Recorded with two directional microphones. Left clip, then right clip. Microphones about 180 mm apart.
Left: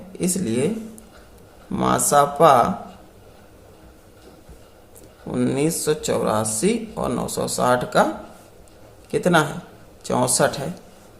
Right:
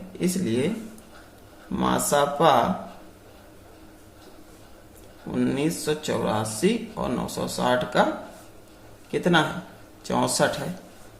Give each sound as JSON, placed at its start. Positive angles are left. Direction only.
{"t": 0.2, "sound": "speech", "side_deg": 35}
{"t": 1.7, "sound": "speech", "side_deg": 35}
{"t": 5.3, "sound": "speech", "side_deg": 35}
{"t": 9.1, "sound": "speech", "side_deg": 30}